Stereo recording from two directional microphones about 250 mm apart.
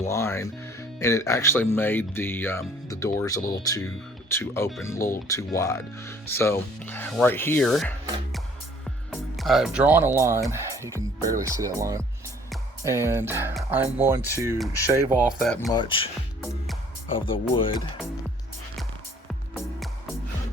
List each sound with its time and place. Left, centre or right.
0.0 s speech: centre
9.0 s speech: centre
15.7 s speech: centre
17.1 s speech: left